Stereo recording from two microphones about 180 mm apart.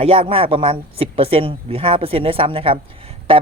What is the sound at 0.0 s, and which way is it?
Speech, 30° right (ahead or behind).